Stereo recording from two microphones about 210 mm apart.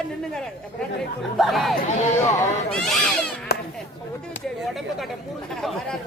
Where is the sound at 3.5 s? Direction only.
50° left (ahead or behind).